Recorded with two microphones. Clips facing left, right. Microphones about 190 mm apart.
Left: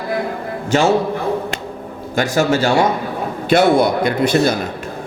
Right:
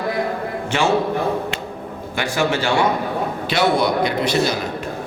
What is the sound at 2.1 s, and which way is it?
A man's voice, 40° left (ahead or behind).